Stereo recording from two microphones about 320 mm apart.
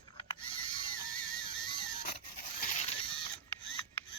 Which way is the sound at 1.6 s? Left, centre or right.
Centre.